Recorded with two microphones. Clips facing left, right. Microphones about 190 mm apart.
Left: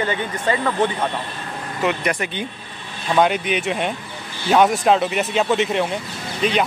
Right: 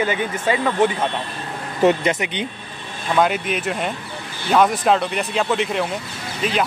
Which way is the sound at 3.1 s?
Centre (ahead or behind).